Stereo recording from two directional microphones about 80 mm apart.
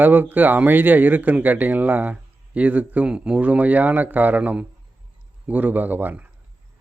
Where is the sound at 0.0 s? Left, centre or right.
Right.